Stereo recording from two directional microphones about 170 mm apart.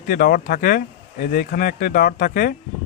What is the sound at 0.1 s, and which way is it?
Speech, 60° left (ahead or behind).